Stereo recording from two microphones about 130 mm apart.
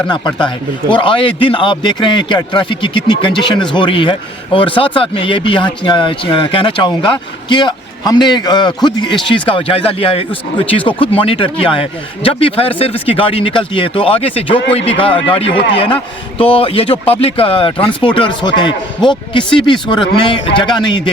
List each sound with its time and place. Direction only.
0.1 s a man's voice: 35° left (ahead or behind)